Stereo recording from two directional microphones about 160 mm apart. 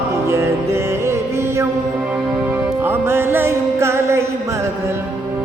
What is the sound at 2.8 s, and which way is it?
Music, 15° right (ahead or behind).